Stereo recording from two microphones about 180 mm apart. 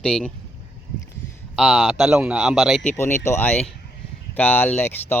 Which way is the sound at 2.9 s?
15° left (ahead or behind).